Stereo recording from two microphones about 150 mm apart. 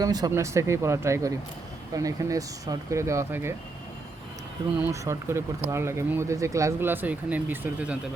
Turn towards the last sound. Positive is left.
turn(degrees=-10)  # may be behind; listen again after turning